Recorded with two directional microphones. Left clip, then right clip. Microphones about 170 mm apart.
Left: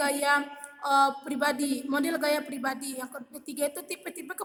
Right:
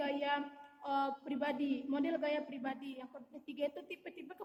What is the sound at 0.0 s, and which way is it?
A woman's voice, 50° left (ahead or behind).